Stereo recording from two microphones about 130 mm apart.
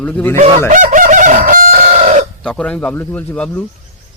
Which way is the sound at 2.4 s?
5° left (ahead or behind).